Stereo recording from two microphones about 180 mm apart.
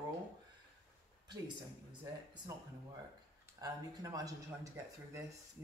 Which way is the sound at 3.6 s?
20° right (ahead or behind).